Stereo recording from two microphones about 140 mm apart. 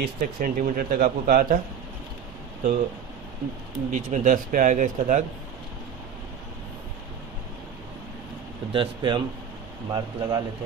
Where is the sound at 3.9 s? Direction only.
60° right (ahead or behind).